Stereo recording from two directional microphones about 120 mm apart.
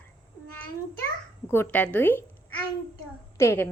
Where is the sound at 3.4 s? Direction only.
20° left (ahead or behind).